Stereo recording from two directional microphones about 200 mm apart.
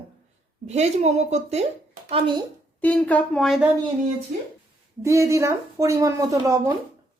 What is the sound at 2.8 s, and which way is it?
Speech, 5° left (ahead or behind).